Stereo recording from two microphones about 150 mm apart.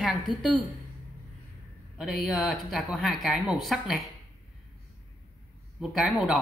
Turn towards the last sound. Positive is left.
turn(degrees=-5)  # may be behind; listen again after turning